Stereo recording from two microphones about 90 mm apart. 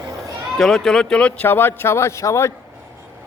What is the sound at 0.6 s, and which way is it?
Speech, centre (ahead or behind).